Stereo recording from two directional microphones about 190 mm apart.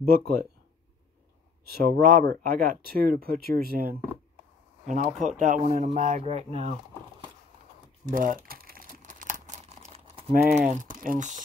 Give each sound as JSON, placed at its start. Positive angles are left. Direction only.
{"t": 0.0, "sound": "speech", "side_deg": -50}
{"t": 1.7, "sound": "speech", "side_deg": -50}
{"t": 4.8, "sound": "speech", "side_deg": -40}
{"t": 8.0, "sound": "crumpling", "side_deg": -45}
{"t": 10.7, "sound": "speech", "side_deg": -45}